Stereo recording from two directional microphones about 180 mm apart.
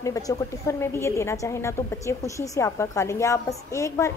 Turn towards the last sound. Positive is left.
turn(degrees=15)  # may be behind; listen again after turning